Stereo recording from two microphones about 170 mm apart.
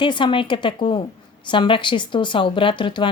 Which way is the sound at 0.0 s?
30° left (ahead or behind).